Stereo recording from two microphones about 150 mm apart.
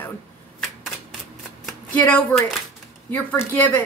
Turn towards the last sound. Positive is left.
turn(degrees=10)  # may be behind; listen again after turning